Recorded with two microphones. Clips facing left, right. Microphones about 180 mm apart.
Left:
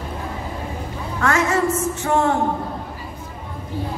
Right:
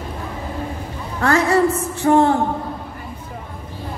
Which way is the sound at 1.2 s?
35° right (ahead or behind).